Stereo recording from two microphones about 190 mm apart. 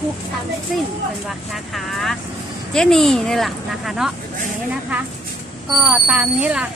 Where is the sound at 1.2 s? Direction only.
Centre (ahead or behind).